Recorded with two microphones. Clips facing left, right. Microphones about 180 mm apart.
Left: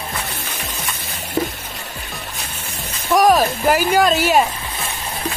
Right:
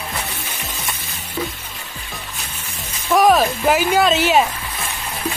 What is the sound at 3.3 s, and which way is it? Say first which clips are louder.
Speech: even; centre (ahead or behind).